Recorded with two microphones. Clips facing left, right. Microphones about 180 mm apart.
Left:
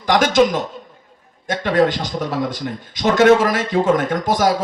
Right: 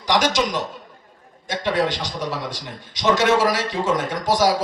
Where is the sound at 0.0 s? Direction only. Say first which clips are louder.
Left 6 dB; 50° left (ahead or behind).